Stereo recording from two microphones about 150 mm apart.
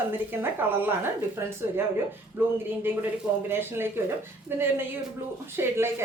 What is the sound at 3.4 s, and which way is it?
A woman's voice, 15° right (ahead or behind).